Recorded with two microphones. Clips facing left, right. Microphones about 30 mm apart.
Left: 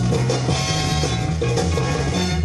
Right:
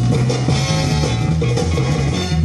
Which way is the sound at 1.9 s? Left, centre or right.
Centre.